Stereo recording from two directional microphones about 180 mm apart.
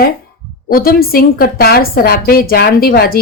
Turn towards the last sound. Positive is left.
turn(degrees=55)  # may be behind; listen again after turning